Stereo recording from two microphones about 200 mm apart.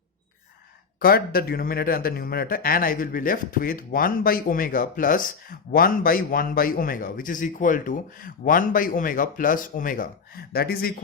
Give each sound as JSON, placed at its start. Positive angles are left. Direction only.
{"t": 0.9, "sound": "speech", "side_deg": 50}